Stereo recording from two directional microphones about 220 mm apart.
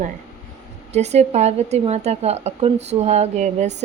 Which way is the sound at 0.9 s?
30° right (ahead or behind).